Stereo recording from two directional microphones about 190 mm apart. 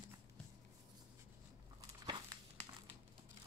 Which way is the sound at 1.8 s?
25° right (ahead or behind).